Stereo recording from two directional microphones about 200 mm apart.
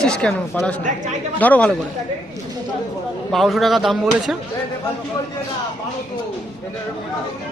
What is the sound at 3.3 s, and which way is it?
Speech, centre (ahead or behind).